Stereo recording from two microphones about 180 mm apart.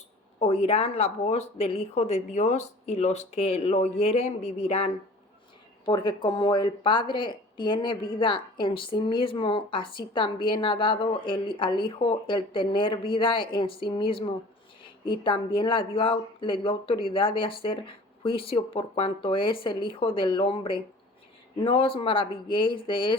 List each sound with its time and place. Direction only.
0.3 s speech: 35° left (ahead or behind)